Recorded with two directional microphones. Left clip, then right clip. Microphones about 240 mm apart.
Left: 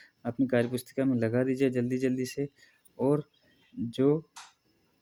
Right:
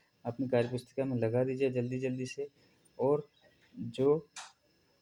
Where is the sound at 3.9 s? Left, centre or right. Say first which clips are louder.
Left 3 dB; left.